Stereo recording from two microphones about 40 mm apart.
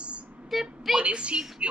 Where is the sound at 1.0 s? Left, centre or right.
Right.